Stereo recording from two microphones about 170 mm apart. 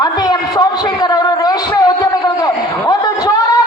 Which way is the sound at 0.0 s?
25° left (ahead or behind).